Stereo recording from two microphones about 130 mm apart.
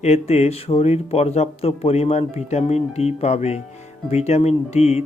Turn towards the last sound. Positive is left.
turn(degrees=55)  # may be behind; listen again after turning